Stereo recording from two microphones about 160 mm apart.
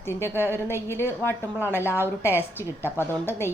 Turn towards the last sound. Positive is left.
turn(degrees=15)  # may be behind; listen again after turning